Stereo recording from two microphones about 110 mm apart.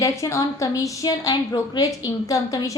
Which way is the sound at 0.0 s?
30° left (ahead or behind).